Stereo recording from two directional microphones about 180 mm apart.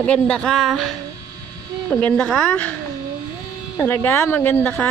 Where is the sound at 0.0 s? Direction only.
5° left (ahead or behind).